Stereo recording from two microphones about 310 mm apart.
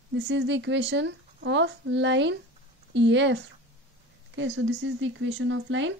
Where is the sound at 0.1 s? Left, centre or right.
Right.